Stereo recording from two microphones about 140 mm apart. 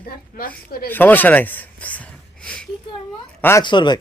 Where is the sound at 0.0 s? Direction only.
90° left.